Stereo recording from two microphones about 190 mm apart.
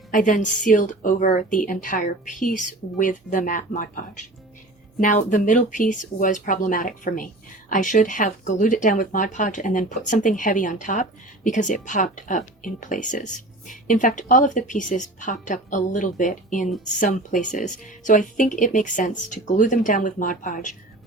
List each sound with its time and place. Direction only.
0.1 s speech: 45° left (ahead or behind)